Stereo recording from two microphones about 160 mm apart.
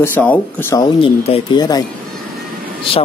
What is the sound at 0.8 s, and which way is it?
Speech, 30° left (ahead or behind).